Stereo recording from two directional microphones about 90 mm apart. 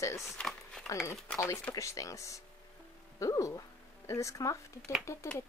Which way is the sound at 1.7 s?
35° left (ahead or behind).